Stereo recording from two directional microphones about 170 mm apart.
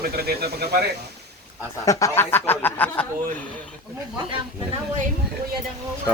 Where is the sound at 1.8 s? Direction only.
20° left (ahead or behind).